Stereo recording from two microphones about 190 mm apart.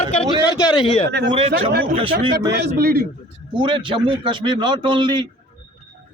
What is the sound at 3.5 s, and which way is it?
Speech, 25° right (ahead or behind).